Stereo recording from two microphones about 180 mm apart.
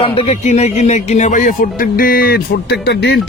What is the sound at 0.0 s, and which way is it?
A man's voice, 30° left (ahead or behind).